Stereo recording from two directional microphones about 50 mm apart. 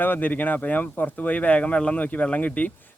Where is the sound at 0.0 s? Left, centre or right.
Left.